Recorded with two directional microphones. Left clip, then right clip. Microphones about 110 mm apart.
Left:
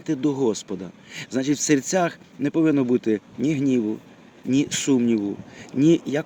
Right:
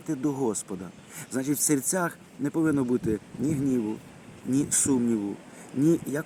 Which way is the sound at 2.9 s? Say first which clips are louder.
Left 6 dB; 30° left (ahead or behind).